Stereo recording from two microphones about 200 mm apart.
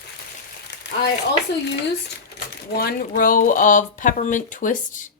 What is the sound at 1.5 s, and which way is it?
Speech, 60° left (ahead or behind).